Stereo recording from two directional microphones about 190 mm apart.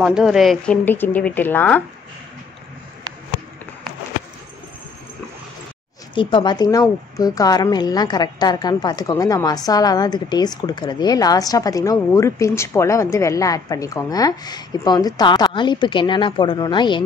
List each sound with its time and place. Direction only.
0.0 s speech: 5° right (ahead or behind)
6.1 s a woman's voice: 25° left (ahead or behind)